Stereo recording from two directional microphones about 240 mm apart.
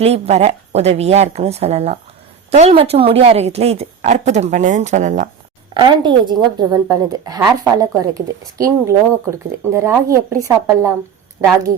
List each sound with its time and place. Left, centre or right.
0.0 s a woman's voice: right
5.7 s a woman's voice: centre